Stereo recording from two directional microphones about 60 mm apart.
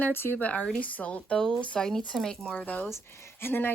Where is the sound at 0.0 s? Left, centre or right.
Left.